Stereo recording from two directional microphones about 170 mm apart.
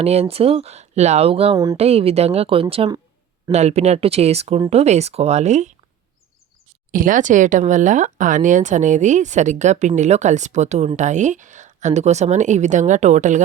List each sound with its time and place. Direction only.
0.0 s speech: 40° right (ahead or behind)
6.9 s speech: 50° right (ahead or behind)